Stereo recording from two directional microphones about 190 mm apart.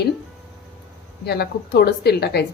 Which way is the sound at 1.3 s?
55° left (ahead or behind).